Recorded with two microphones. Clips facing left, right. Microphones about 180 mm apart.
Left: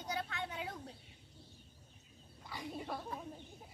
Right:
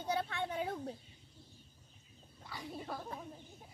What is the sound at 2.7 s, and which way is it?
Speech, centre (ahead or behind).